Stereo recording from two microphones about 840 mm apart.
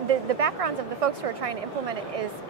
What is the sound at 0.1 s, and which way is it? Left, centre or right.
A woman's voice, right.